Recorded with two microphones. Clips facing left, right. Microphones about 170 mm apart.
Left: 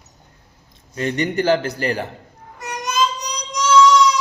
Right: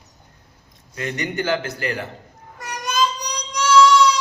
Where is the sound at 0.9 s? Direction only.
35° left (ahead or behind).